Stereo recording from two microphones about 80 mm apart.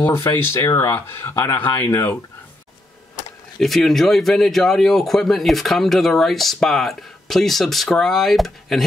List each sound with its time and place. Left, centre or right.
0.3 s speech: left
3.5 s speech: centre